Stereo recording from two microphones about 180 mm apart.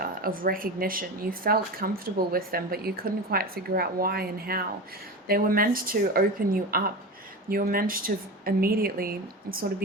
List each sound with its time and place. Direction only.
0.0 s a woman's voice: 55° right (ahead or behind)